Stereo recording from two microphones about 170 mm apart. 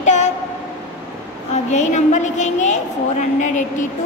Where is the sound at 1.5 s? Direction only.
45° left (ahead or behind).